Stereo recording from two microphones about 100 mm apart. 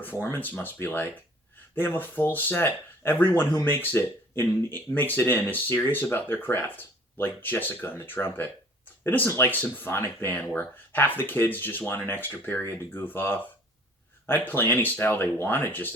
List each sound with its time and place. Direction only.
0.0 s speech: 20° left (ahead or behind)